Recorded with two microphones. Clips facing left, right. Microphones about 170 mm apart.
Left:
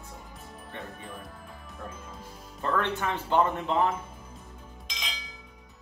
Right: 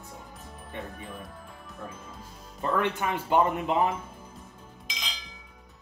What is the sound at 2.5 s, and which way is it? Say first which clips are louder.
Speech: right 1 dB; 15° right (ahead or behind).